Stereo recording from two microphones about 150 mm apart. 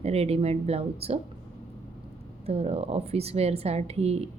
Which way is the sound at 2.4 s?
40° right (ahead or behind).